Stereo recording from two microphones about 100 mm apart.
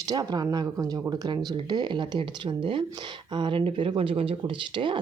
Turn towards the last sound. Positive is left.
turn(degrees=-55)  # may be behind; listen again after turning